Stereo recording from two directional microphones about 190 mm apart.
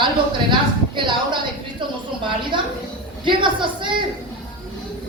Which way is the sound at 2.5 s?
25° right (ahead or behind).